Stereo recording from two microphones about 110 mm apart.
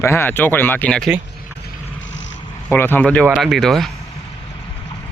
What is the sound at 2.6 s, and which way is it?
Speech, 20° left (ahead or behind).